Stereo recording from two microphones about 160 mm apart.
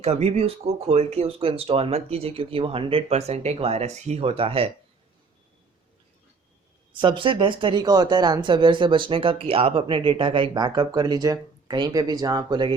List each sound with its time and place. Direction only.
0.0 s speech: 40° right (ahead or behind)
7.0 s speech: 30° right (ahead or behind)